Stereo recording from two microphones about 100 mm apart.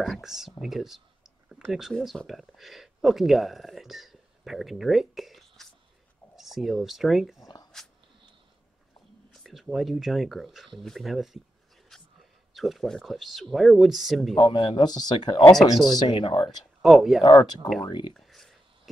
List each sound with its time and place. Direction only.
0.0 s speech: centre (ahead or behind)
9.3 s speech: centre (ahead or behind)
11.9 s whispering: 5° left (ahead or behind)
12.5 s speech: centre (ahead or behind)
14.3 s speech: 50° left (ahead or behind)
16.8 s speech: centre (ahead or behind)
17.2 s speech: 50° left (ahead or behind)
18.1 s a sound: 5° left (ahead or behind)